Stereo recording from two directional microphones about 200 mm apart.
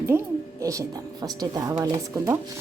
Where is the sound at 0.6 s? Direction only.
15° right (ahead or behind).